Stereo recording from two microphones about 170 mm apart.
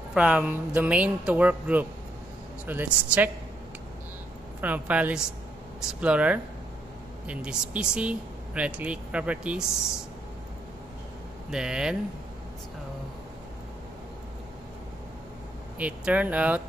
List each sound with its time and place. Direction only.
0.1 s speech: 5° right (ahead or behind)
4.6 s speech: 10° right (ahead or behind)
11.5 s speech: 5° right (ahead or behind)
15.8 s speech: 10° right (ahead or behind)